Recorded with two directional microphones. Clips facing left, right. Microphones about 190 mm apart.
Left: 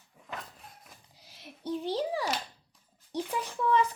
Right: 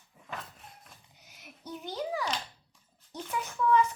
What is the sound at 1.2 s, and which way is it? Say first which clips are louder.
A child's voice: left 8 dB; 30° left (ahead or behind).